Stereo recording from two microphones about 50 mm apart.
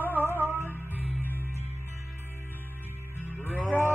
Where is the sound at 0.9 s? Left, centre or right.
Right.